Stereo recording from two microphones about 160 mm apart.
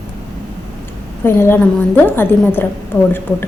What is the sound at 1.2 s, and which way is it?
A woman's voice, 15° left (ahead or behind).